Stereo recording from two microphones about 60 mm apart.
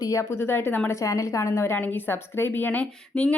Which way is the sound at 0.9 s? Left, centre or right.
Left.